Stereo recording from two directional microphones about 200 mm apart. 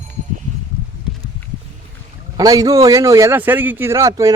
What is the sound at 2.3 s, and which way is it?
Speech, 20° right (ahead or behind).